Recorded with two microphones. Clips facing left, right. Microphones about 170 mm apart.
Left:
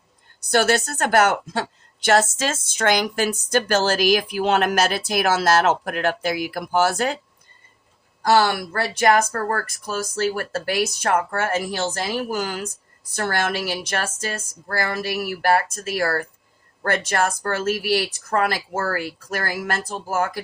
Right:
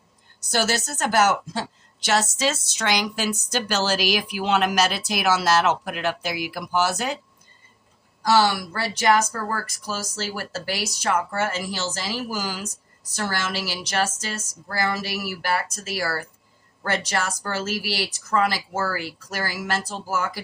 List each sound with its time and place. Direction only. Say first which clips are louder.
0.4 s a woman's voice: left 5 dB; 60° left (ahead or behind)
8.2 s speech: left 2 dB; 55° left (ahead or behind)